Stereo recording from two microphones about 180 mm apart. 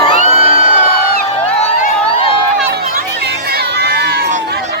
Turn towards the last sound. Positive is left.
turn(degrees=-70)  # may be behind; listen again after turning